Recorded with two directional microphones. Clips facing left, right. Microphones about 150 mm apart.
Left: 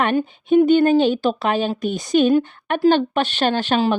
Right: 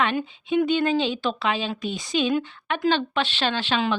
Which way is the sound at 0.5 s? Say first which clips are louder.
Left 8 dB; 45° left (ahead or behind).